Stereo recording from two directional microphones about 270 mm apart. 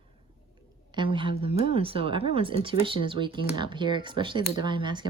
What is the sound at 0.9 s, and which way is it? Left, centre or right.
A woman's voice, centre.